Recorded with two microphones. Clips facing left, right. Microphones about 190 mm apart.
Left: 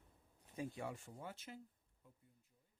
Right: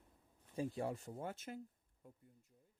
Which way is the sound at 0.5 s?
35° right (ahead or behind).